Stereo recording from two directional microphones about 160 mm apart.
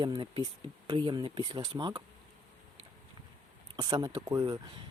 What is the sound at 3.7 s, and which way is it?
Speech, 25° right (ahead or behind).